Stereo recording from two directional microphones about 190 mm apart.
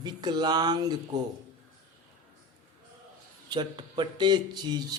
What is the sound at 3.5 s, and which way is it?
Speech, 25° right (ahead or behind).